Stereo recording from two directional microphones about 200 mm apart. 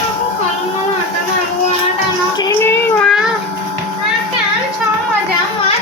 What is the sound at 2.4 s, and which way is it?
Child singing, 10° left (ahead or behind).